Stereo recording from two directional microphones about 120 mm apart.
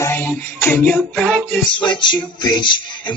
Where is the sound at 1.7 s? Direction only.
40° left (ahead or behind).